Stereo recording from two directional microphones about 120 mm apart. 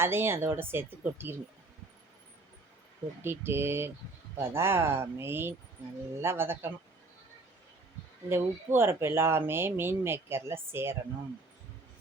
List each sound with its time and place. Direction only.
0.0 s speech: 20° right (ahead or behind)
3.2 s speech: 20° right (ahead or behind)
8.3 s speech: 20° right (ahead or behind)